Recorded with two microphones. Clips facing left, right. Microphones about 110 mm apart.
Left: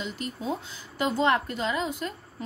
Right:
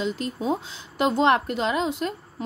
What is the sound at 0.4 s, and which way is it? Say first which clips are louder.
Speech: right 5 dB; 25° right (ahead or behind).